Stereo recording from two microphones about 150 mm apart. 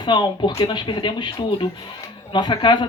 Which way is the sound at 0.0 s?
30° left (ahead or behind).